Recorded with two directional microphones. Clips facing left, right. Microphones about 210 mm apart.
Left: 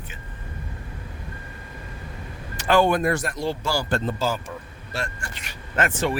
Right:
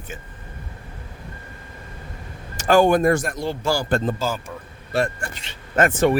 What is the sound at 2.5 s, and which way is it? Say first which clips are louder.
Speech: right 4 dB; 45° right (ahead or behind).